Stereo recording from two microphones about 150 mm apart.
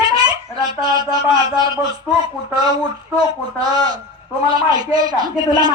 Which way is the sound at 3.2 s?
25° right (ahead or behind).